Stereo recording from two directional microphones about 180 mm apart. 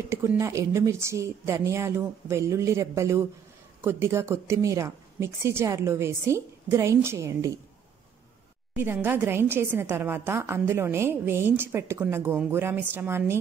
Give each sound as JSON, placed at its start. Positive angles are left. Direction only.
{"t": 0.1, "sound": "a woman's voice", "side_deg": -15}
{"t": 8.7, "sound": "a woman's voice", "side_deg": -10}